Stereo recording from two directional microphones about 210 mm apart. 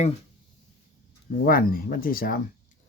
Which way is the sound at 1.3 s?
45° left (ahead or behind).